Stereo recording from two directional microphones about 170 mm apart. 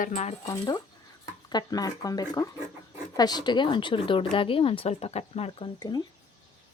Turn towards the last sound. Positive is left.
turn(degrees=25)  # may be behind; listen again after turning